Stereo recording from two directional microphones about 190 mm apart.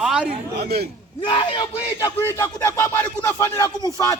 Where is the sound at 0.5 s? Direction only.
60° right (ahead or behind).